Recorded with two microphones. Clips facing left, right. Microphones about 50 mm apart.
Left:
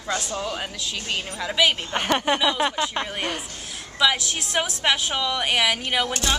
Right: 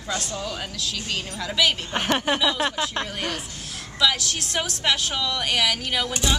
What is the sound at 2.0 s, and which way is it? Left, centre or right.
A woman's voice, centre.